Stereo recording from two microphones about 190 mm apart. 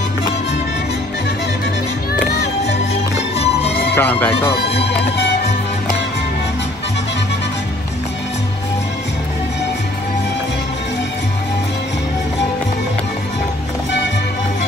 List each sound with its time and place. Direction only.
2.3 s music: 60° left (ahead or behind)
2.9 s music: 35° left (ahead or behind)
3.9 s speech: 10° left (ahead or behind)